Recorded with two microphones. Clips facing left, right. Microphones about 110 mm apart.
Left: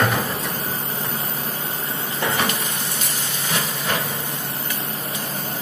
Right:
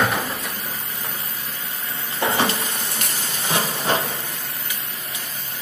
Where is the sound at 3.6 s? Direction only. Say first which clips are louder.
Right 4 dB; 30° right (ahead or behind).